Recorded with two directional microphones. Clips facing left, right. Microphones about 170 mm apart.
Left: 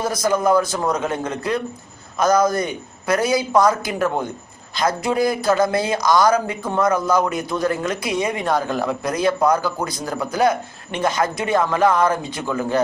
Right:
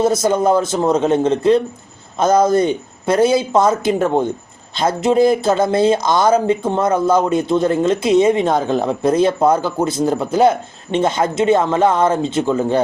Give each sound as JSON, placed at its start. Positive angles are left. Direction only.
{"t": 0.0, "sound": "speech", "side_deg": -25}